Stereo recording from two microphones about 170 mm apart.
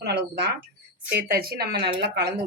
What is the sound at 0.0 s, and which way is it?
Speech, 80° right.